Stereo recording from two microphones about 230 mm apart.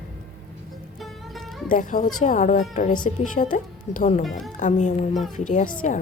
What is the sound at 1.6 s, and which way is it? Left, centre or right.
A child's voice, left.